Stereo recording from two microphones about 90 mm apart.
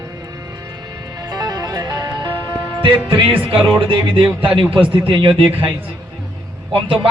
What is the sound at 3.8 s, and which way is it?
A man's voice, 70° right (ahead or behind).